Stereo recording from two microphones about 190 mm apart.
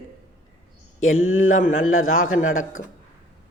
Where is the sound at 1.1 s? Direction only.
90° left.